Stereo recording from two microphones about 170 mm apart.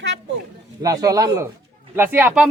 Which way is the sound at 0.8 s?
20° right (ahead or behind).